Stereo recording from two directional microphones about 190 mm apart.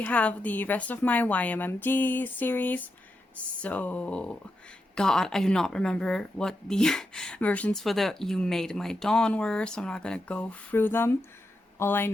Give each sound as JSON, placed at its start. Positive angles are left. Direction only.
{"t": 0.0, "sound": "a woman's voice", "side_deg": 5}